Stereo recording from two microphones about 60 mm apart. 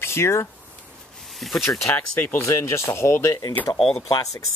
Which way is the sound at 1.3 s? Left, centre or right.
Centre.